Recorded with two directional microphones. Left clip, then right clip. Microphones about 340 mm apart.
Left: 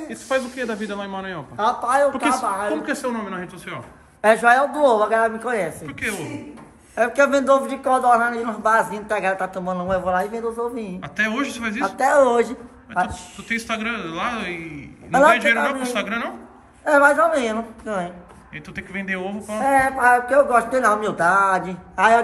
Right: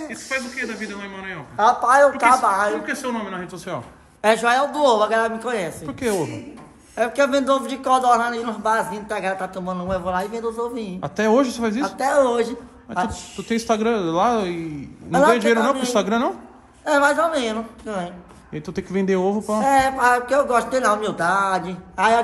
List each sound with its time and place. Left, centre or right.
1.6 s a man's voice: centre
16.8 s a man's voice: centre
18.5 s speech: centre
19.6 s a man's voice: centre